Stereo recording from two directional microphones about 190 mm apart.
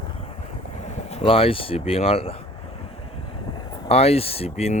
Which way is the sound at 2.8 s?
30° left (ahead or behind).